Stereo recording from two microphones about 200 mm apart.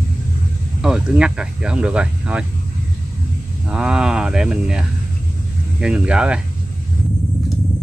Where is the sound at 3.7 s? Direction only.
5° right (ahead or behind).